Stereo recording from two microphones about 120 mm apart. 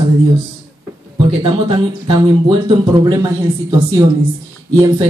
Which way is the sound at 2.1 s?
35° right (ahead or behind).